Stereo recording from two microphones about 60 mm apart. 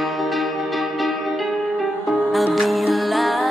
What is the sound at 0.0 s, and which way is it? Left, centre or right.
Music, centre.